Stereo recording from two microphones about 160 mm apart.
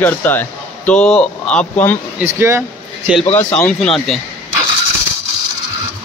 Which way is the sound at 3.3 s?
10° left (ahead or behind).